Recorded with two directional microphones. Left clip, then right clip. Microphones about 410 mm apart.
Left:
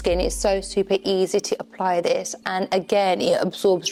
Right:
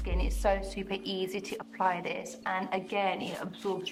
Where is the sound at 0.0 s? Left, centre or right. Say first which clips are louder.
Left 11 dB; left.